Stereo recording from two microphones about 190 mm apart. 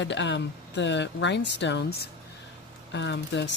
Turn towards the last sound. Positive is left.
turn(degrees=70)  # may be behind; listen again after turning